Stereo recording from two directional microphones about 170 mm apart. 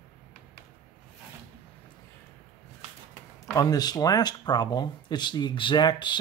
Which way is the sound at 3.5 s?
25° left (ahead or behind).